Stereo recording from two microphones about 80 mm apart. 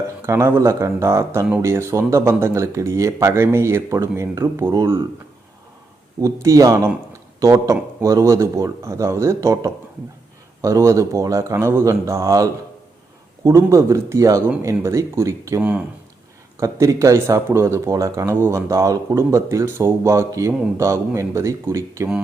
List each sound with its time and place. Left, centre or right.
0.2 s speech: right
6.1 s speech: right
10.6 s speech: right